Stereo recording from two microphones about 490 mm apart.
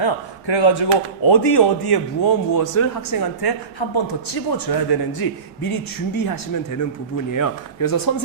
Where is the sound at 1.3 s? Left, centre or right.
Left.